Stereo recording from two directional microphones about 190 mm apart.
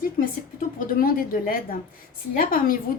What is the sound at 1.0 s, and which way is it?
A woman's voice, 50° left (ahead or behind).